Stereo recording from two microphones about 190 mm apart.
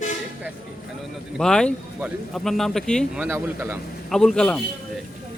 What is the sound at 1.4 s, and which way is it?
Speech, 5° left (ahead or behind).